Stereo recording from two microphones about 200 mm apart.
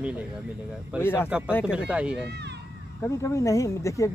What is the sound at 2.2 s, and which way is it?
Speech, 55° right (ahead or behind).